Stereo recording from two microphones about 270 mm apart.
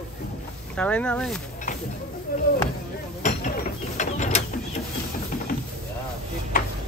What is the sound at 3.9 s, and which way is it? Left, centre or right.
Mechanisms, left.